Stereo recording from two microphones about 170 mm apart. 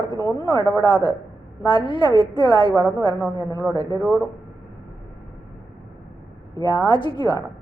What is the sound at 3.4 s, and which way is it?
Speech, 20° left (ahead or behind).